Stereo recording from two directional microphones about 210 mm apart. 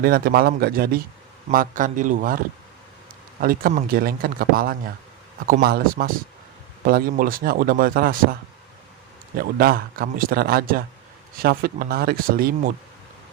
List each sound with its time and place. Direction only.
0.0 s speech: 45° right (ahead or behind)
3.4 s speech: 45° right (ahead or behind)
9.4 s speech: 45° right (ahead or behind)